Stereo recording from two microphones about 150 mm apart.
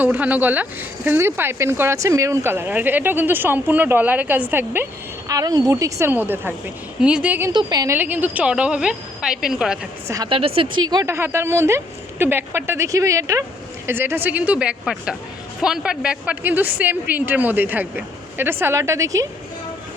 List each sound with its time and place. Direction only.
0.0 s speech: 10° right (ahead or behind)
5.3 s a woman's voice: 25° right (ahead or behind)
7.5 s a woman's voice: 25° right (ahead or behind)
7.9 s speech: 10° right (ahead or behind)
10.2 s a woman's voice: 40° right (ahead or behind)
10.8 s a woman's voice: 20° right (ahead or behind)